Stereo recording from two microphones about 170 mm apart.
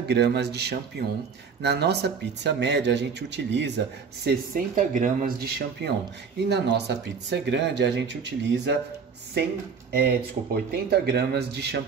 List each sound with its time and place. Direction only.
0.1 s speech: 75° right (ahead or behind); by 5.9 s 60° right (ahead or behind)
6.5 s speech: 90° right
9.9 s speech: 65° right (ahead or behind)